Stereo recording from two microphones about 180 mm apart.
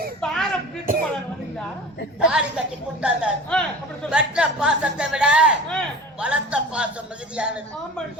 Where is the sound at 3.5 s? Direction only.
5° left (ahead or behind).